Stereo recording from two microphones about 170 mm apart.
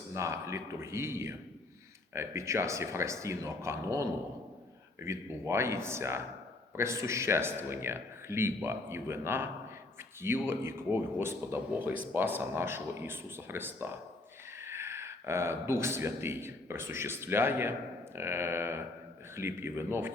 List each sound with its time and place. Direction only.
0.1 s speech: 15° right (ahead or behind)